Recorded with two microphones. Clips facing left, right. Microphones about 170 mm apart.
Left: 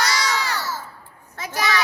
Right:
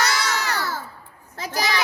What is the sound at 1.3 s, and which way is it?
Speech, 35° right (ahead or behind).